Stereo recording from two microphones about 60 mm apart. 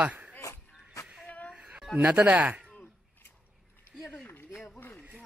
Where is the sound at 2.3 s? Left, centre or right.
Right.